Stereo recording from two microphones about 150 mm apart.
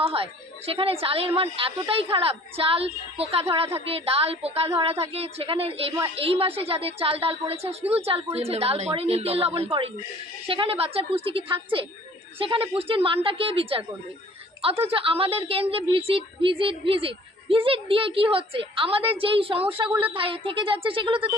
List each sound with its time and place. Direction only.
0.0 s a woman's voice: 40° right (ahead or behind)